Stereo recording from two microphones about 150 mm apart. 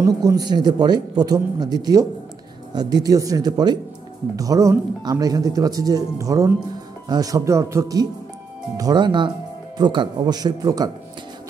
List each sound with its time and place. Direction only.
0.0 s speech: 20° right (ahead or behind)